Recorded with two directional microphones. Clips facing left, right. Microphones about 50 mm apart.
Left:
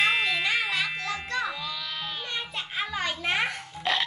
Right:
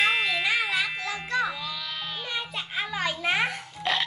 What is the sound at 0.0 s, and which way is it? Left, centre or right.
Music, centre.